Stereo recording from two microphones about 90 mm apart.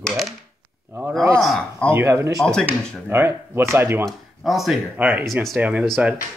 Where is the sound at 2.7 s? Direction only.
25° right (ahead or behind).